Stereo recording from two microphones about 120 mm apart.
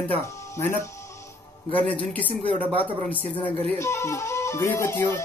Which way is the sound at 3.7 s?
20° left (ahead or behind).